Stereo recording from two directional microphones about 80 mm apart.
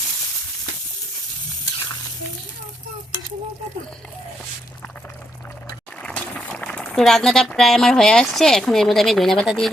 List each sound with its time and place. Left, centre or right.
6.0 s boiling: centre
6.8 s speech: centre